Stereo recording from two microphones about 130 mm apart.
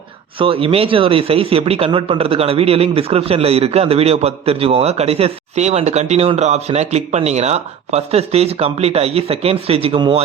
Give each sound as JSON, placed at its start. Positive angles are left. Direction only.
{"t": 0.3, "sound": "speech", "side_deg": -45}